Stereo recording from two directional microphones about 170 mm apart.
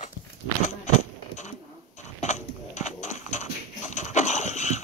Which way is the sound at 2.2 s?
45° left (ahead or behind).